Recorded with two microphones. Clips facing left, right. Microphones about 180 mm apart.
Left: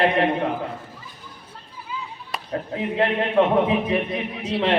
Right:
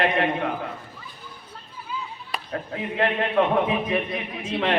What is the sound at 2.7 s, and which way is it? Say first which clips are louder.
A man's voice: left 2 dB; 30° left (ahead or behind).